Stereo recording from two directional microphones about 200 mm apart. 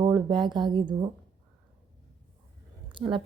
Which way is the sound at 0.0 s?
20° right (ahead or behind).